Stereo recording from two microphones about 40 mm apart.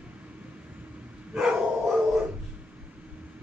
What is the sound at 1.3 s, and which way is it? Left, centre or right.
Dog, right.